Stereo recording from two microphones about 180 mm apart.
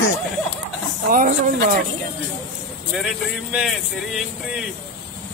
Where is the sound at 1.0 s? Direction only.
50° right (ahead or behind).